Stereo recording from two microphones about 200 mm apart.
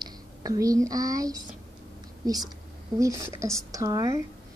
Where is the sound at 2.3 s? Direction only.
20° right (ahead or behind).